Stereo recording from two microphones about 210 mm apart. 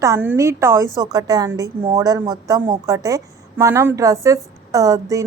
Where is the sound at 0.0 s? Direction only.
10° right (ahead or behind).